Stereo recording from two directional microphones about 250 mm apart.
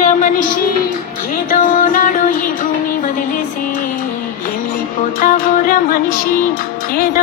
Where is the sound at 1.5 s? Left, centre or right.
Left.